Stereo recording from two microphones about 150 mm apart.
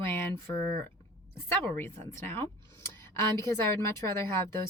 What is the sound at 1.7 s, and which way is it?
Speech, 15° left (ahead or behind).